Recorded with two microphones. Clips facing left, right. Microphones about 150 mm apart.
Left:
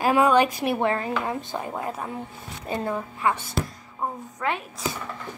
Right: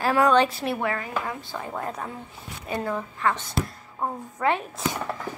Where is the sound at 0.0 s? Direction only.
10° left (ahead or behind).